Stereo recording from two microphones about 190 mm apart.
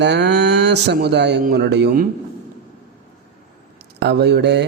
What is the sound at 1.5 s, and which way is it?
Speech, 60° right (ahead or behind).